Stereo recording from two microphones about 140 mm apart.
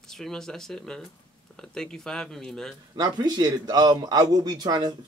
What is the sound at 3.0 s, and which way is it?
Speech, 30° right (ahead or behind).